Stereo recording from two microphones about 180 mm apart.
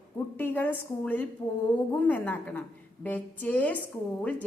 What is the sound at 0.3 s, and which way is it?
A woman's voice, 10° left (ahead or behind).